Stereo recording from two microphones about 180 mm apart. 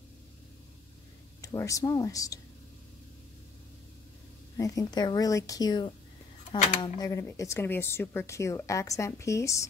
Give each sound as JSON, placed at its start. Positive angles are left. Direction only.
{"t": 1.4, "sound": "speech", "side_deg": 20}
{"t": 4.6, "sound": "speech", "side_deg": 20}